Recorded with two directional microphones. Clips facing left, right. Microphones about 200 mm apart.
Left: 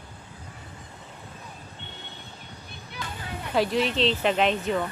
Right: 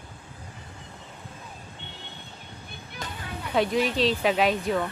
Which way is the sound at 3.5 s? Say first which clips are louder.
Even; centre (ahead or behind).